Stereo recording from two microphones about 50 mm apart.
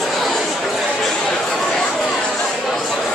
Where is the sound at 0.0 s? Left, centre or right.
Centre.